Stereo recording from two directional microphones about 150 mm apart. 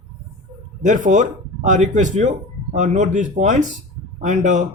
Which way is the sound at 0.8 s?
55° right (ahead or behind).